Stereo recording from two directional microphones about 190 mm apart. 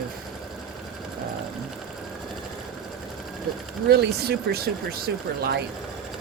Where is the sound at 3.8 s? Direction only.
55° right (ahead or behind).